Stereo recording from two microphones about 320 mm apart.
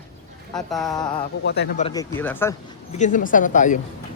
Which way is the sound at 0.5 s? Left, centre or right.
Centre.